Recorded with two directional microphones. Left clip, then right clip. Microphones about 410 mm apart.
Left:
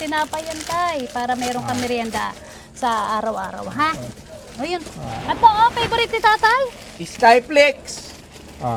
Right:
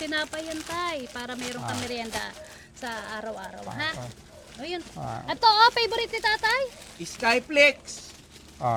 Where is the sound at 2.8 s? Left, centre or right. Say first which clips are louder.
Left 14 dB; centre.